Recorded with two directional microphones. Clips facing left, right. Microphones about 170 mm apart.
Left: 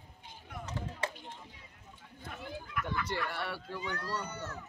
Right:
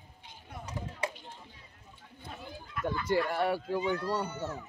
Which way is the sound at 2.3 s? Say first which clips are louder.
Left 2 dB; 30° right (ahead or behind).